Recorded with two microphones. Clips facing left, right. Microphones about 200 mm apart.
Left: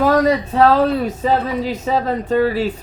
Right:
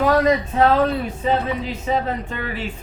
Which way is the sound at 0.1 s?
35° left (ahead or behind).